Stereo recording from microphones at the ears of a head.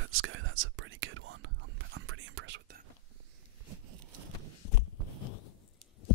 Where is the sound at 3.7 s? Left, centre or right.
Right.